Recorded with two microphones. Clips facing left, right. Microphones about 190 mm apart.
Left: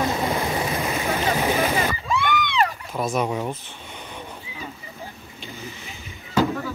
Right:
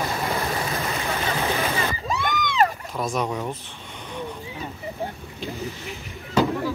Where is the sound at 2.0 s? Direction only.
40° right (ahead or behind).